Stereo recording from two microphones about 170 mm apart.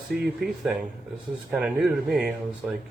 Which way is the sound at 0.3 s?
Centre (ahead or behind).